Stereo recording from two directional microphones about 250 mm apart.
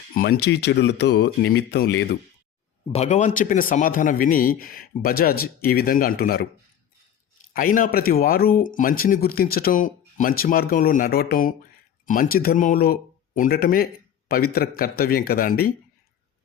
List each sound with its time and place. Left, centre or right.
0.1 s speech: left
2.9 s speech: left
7.5 s speech: left